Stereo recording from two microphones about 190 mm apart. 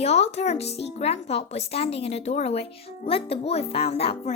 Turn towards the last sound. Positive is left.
turn(degrees=30)  # may be behind; listen again after turning